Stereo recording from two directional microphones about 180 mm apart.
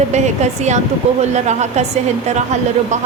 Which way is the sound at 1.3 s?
40° right (ahead or behind).